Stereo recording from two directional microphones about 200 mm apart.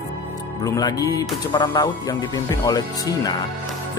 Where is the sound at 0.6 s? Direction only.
20° left (ahead or behind).